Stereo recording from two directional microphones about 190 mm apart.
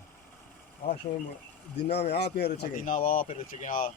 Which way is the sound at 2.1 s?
60° left (ahead or behind).